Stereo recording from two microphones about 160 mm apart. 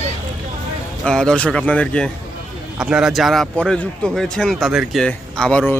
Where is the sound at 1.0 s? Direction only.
5° left (ahead or behind).